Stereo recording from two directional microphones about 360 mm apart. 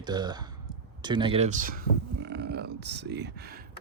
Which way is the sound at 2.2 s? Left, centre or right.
Right.